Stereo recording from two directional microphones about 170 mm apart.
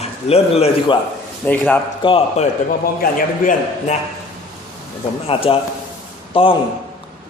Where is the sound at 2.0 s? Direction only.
30° left (ahead or behind).